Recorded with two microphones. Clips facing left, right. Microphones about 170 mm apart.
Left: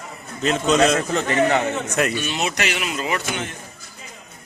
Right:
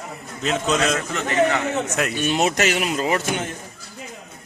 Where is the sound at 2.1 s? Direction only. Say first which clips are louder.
Right 4 dB; 45° right (ahead or behind).